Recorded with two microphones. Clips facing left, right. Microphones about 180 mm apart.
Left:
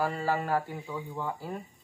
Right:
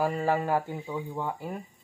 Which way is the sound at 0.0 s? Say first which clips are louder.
Right 3 dB; 15° right (ahead or behind).